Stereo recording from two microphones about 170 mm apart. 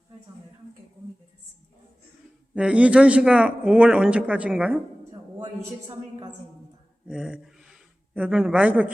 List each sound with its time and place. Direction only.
2.6 s a man's voice: 5° right (ahead or behind)
7.1 s speech: 5° right (ahead or behind)